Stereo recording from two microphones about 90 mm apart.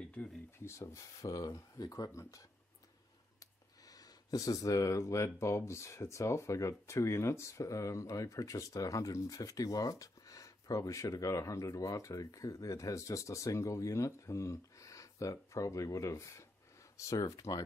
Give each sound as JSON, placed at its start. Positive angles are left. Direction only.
{"t": 0.2, "sound": "speech", "side_deg": 20}
{"t": 0.7, "sound": "speech", "side_deg": 35}